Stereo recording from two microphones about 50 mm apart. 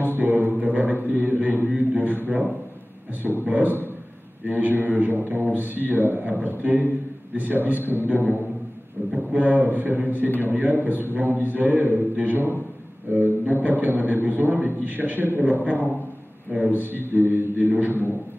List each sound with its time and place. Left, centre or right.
0.1 s a man's voice: right
3.2 s a man's voice: right
3.4 s a man's voice: right
9.1 s a man's voice: right
16.8 s a man's voice: right